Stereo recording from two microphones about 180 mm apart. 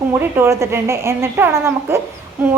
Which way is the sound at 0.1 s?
15° right (ahead or behind).